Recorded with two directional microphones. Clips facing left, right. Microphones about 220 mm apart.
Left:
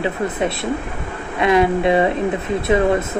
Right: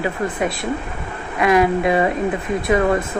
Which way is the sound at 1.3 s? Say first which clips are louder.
Even; 25° left (ahead or behind).